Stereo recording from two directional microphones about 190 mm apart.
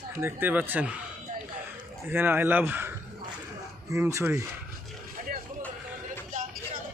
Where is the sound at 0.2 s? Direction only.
10° right (ahead or behind).